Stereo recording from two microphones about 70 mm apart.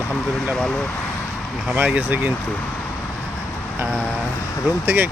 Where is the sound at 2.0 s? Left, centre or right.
Right.